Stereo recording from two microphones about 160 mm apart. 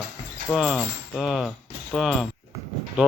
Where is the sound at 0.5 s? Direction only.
5° right (ahead or behind).